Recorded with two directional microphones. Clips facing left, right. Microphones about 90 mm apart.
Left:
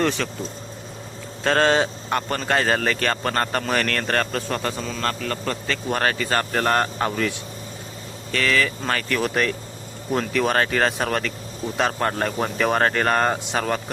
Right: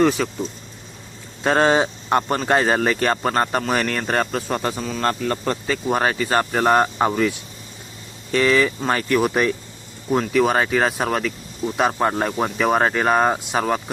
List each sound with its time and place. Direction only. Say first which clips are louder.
0.0 s speech: right 5 dB; 5° right (ahead or behind)
1.5 s speech: right 2 dB; 15° right (ahead or behind)